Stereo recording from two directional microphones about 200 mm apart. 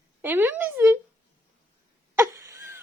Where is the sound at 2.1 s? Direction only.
15° right (ahead or behind).